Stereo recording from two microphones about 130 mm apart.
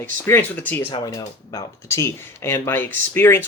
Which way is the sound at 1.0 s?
25° left (ahead or behind).